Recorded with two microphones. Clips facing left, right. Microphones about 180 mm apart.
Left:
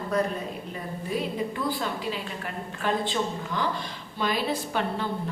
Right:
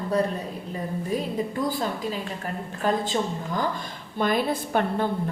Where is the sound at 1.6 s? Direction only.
45° right (ahead or behind).